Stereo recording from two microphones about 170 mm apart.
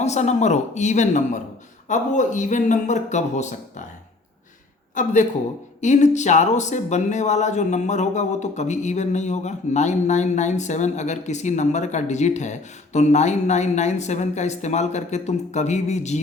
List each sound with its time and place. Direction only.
0.0 s speech: 40° left (ahead or behind)
5.0 s speech: 50° left (ahead or behind)